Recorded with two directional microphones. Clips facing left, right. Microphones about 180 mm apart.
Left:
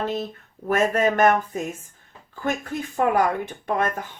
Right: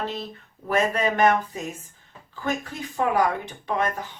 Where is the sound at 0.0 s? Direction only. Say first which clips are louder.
Left 4 dB; 45° left (ahead or behind).